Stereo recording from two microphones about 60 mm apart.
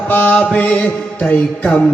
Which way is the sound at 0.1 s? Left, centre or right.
Left.